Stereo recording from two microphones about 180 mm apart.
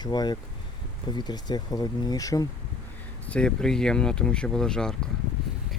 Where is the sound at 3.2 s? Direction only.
5° left (ahead or behind).